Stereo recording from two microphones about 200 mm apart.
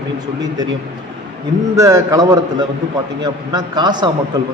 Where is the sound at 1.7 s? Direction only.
15° right (ahead or behind).